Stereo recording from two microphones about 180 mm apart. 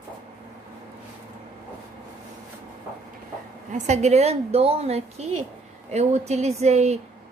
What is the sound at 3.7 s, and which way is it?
A woman's voice, 40° right (ahead or behind).